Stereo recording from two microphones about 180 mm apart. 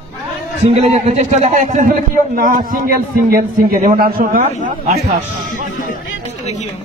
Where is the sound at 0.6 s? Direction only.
35° right (ahead or behind); by 4.4 s 50° right (ahead or behind).